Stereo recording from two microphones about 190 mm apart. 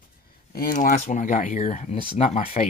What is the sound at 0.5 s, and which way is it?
Speech, 45° left (ahead or behind).